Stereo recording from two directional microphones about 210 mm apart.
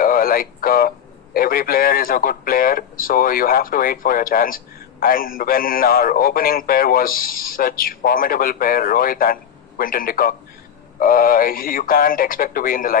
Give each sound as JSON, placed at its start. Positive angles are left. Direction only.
{"t": 0.0, "sound": "a man's voice", "side_deg": 40}